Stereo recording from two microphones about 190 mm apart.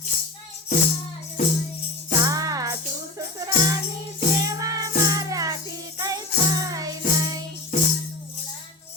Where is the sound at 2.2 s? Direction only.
20° right (ahead or behind).